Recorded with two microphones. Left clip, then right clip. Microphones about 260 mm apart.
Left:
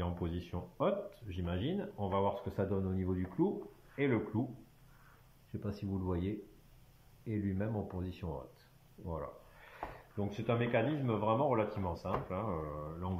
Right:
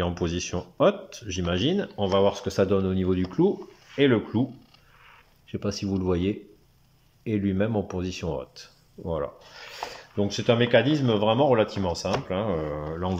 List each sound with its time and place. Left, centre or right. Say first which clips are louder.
0.0 s speech: right 13 dB; right
5.5 s speech: right 13 dB; right